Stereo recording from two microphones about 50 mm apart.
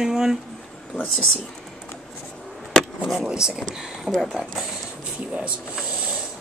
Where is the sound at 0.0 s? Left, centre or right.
Centre.